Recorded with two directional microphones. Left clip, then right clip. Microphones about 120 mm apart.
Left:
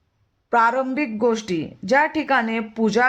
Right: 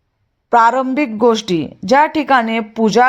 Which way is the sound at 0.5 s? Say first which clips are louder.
Right 7 dB; 30° right (ahead or behind).